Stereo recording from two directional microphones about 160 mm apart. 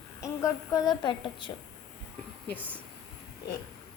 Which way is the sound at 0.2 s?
20° left (ahead or behind).